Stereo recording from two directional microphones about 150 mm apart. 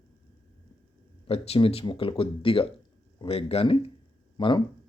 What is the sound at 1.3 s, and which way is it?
Speech, 40° left (ahead or behind).